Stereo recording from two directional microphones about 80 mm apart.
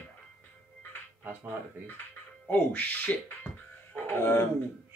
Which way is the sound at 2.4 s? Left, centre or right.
Centre.